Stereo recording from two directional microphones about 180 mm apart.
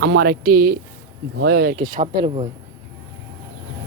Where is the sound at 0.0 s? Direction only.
65° right (ahead or behind).